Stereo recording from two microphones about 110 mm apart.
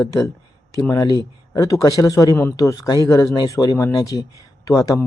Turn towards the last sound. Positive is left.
turn(degrees=30)  # may be behind; listen again after turning